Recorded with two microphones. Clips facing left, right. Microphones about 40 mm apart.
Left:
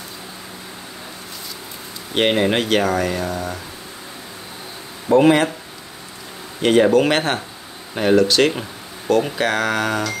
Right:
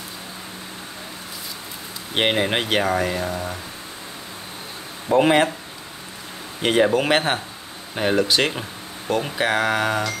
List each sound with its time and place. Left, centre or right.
2.1 s speech: centre
5.1 s speech: centre
6.6 s speech: centre
8.2 s speech: centre